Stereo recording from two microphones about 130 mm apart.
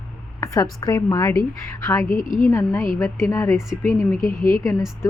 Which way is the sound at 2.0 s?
90° left.